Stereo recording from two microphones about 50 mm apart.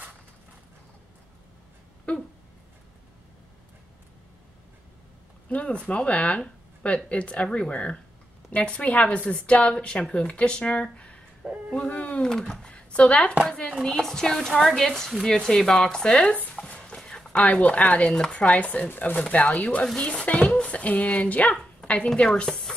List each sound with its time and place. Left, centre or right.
2.1 s a sound: left
5.5 s a woman's voice: left
12.3 s speech: centre
12.7 s speech: left
13.8 s speech: centre
16.5 s a sound: left
18.1 s a woman's voice: left